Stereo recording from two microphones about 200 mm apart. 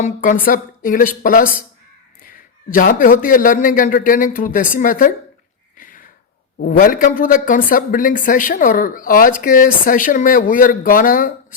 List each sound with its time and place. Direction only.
0.0 s a man's voice: 45° left (ahead or behind)
5.7 s a sound: 40° left (ahead or behind)
6.7 s a man's voice: 45° left (ahead or behind)